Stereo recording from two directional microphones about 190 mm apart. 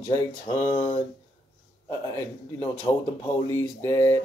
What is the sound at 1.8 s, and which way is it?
Speech, 15° left (ahead or behind).